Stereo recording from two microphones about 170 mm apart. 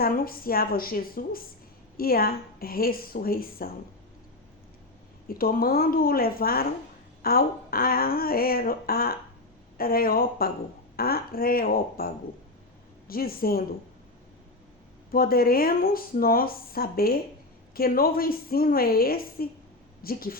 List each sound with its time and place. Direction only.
0.0 s speech: 60° left (ahead or behind)
5.3 s speech: 60° left (ahead or behind)
13.1 s speech: 60° left (ahead or behind)
15.1 s speech: 60° left (ahead or behind)